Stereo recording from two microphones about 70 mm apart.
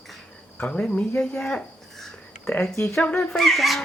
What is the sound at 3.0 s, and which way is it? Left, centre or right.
Speech, centre.